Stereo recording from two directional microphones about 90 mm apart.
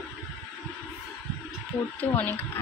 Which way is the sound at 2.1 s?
20° left (ahead or behind).